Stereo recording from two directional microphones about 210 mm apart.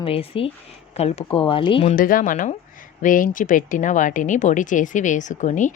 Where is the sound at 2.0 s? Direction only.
40° left (ahead or behind).